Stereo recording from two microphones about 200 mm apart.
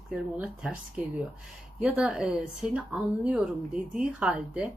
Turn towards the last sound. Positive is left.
turn(degrees=-5)  # may be behind; listen again after turning